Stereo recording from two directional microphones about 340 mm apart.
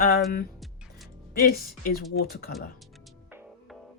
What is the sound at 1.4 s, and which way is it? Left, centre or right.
Speech, left.